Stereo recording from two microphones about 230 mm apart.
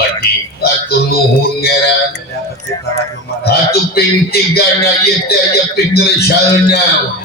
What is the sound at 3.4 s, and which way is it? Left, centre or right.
Speech, left.